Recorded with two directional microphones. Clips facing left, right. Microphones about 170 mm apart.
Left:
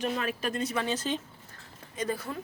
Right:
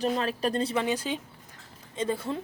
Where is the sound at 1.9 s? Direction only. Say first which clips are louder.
Right 3 dB; 25° right (ahead or behind).